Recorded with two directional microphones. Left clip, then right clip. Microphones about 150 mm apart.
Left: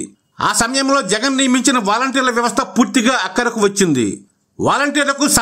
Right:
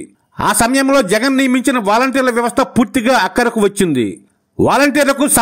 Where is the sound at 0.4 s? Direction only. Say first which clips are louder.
Right 3 dB; 40° right (ahead or behind).